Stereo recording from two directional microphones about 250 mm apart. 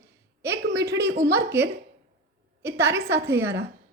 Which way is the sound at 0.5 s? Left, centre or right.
Right.